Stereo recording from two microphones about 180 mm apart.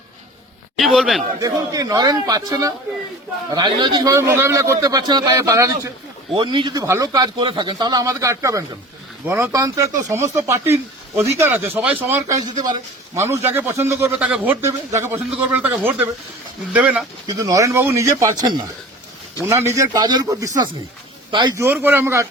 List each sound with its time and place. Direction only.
0.8 s speech: centre (ahead or behind)
1.4 s a man's voice: 20° right (ahead or behind)
17.2 s a man's voice: 20° right (ahead or behind)
21.6 s a man's voice: 10° right (ahead or behind)